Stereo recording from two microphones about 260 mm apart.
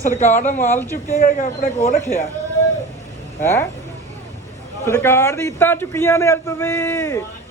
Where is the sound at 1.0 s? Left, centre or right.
Left.